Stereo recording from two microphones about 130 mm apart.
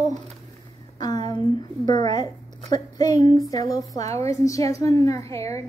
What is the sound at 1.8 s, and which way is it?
Child singing, 35° left (ahead or behind).